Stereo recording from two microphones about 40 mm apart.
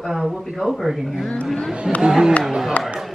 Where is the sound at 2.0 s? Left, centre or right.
Centre.